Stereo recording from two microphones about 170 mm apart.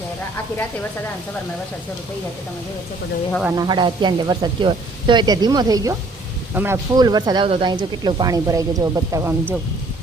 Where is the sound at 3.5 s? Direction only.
25° right (ahead or behind).